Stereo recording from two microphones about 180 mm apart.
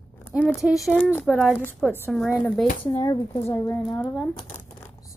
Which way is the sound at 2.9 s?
20° left (ahead or behind).